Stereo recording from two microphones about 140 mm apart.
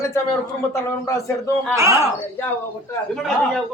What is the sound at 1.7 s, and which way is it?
Speech, 20° right (ahead or behind).